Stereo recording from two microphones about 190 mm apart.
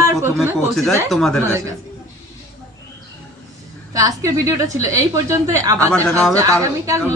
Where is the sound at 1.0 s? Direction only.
Centre (ahead or behind).